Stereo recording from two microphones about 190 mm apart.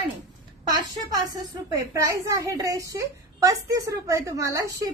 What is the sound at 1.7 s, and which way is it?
A woman's voice, 20° right (ahead or behind).